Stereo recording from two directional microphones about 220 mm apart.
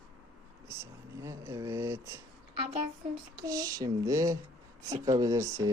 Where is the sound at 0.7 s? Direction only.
15° right (ahead or behind).